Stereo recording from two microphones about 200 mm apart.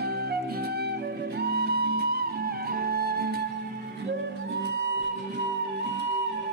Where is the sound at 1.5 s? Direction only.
55° right (ahead or behind).